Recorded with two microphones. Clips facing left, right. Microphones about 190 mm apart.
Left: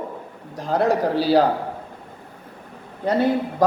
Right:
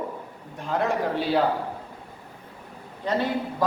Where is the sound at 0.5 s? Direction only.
35° left (ahead or behind).